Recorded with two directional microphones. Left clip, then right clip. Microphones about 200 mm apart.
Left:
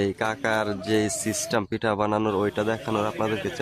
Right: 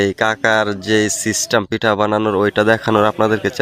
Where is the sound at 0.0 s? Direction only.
30° right (ahead or behind).